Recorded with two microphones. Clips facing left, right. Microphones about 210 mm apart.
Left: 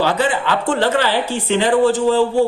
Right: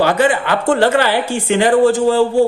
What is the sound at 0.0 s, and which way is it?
Speech, 50° right (ahead or behind).